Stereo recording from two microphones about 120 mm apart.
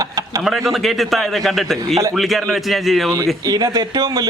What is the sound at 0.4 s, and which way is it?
A man's voice, centre (ahead or behind).